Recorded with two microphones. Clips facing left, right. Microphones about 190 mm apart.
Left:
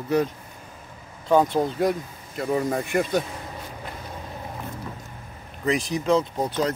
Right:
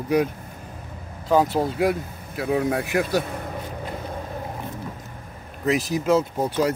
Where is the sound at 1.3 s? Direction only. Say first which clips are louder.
Even; 5° right (ahead or behind).